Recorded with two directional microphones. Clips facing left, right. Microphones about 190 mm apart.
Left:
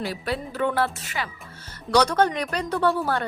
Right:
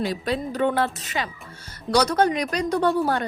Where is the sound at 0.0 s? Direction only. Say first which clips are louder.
Right 3 dB; 20° right (ahead or behind).